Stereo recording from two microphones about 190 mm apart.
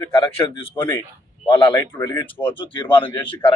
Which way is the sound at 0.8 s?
10° left (ahead or behind).